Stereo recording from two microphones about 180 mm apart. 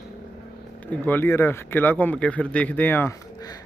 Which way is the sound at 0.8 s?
10° left (ahead or behind).